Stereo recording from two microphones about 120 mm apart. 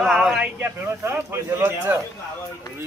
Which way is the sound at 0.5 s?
15° right (ahead or behind).